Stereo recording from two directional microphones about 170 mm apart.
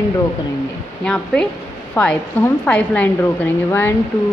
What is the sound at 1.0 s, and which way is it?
A woman's voice, 5° left (ahead or behind).